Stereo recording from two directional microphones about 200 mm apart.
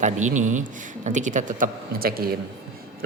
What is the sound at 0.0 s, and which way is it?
Speech, 35° right (ahead or behind).